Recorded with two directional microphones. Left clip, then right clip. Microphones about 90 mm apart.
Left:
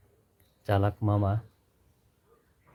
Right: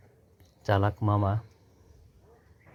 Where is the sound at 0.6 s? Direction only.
15° right (ahead or behind).